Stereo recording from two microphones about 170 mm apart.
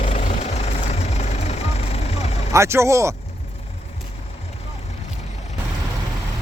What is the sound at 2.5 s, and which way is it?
Speech, 15° right (ahead or behind).